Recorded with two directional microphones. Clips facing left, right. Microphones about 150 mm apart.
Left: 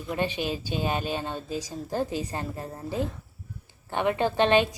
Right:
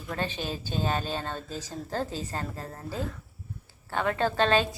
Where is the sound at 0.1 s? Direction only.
15° left (ahead or behind).